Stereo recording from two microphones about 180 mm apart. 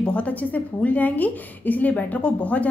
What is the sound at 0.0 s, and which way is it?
A woman's voice, 5° left (ahead or behind).